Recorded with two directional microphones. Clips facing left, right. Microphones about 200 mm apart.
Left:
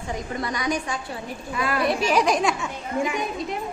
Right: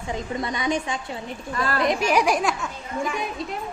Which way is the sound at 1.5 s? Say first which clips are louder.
Even; 10° left (ahead or behind).